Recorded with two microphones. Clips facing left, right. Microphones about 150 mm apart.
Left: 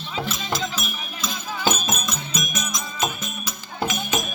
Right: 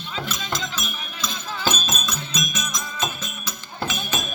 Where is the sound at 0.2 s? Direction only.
10° left (ahead or behind).